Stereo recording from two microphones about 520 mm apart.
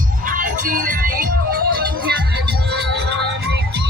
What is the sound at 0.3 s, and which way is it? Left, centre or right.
Music, centre.